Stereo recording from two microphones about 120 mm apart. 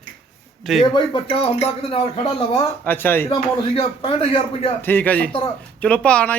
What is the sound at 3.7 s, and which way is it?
Speech, 50° left (ahead or behind).